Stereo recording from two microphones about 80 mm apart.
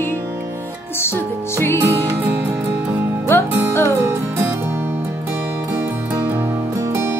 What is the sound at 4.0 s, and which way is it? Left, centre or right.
Music, right.